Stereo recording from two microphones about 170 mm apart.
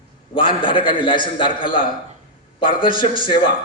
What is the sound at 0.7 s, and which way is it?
A man's voice, 30° left (ahead or behind).